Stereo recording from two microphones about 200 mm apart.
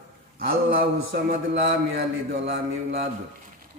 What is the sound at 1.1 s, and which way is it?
Mantra, 55° right (ahead or behind).